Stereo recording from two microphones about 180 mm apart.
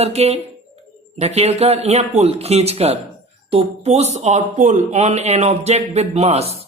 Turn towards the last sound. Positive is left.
turn(degrees=-35)  # may be behind; listen again after turning